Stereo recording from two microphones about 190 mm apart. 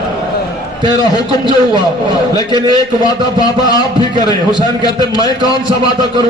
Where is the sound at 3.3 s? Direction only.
20° left (ahead or behind).